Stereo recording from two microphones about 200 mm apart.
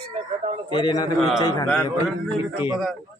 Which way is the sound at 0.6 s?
20° left (ahead or behind).